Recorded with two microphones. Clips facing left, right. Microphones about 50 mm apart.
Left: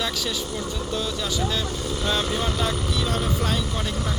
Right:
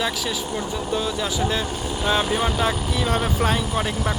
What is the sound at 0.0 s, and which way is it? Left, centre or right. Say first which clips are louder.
Speech: right 2 dB; centre.